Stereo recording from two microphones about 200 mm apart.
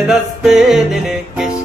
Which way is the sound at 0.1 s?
Centre (ahead or behind).